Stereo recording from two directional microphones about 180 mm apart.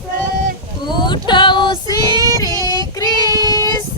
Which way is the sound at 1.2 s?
25° left (ahead or behind).